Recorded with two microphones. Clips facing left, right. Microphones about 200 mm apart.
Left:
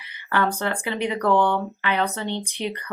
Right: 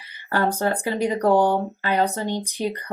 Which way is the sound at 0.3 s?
35° right (ahead or behind).